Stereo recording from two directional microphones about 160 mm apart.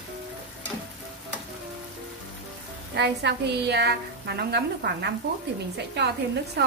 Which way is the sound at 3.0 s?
90° right.